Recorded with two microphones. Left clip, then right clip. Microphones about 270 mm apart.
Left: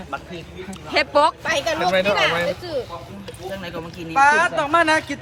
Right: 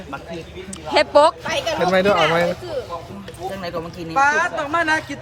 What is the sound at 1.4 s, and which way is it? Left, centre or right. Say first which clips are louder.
Speech: left 1 dB; left.